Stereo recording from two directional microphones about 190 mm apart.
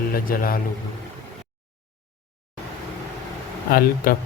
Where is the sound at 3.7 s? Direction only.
50° left (ahead or behind).